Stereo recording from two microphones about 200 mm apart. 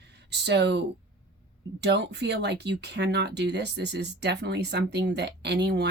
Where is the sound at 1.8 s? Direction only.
60° right (ahead or behind).